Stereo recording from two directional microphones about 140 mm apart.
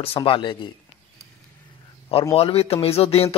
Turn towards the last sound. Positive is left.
turn(degrees=45)  # may be behind; listen again after turning